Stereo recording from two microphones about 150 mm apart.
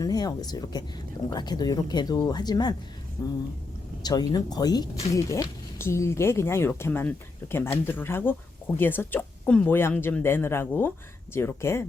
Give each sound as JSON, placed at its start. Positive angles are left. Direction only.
{"t": 0.0, "sound": "speech", "side_deg": 25}
{"t": 4.0, "sound": "speech", "side_deg": 25}